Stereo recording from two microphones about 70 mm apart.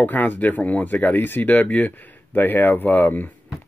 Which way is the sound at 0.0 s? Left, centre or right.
Left.